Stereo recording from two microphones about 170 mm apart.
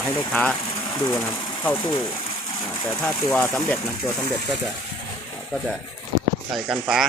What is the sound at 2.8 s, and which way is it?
Speech, 15° left (ahead or behind).